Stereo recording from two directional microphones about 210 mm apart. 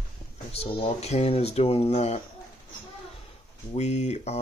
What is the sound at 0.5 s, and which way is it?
Speech, 30° left (ahead or behind).